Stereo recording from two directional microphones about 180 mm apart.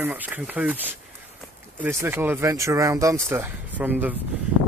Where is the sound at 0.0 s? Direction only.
10° right (ahead or behind).